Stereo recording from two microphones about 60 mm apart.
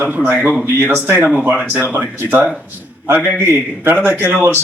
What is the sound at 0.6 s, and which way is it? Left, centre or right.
Speech, right.